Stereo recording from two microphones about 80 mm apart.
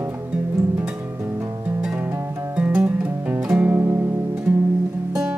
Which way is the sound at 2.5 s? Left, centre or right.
Centre.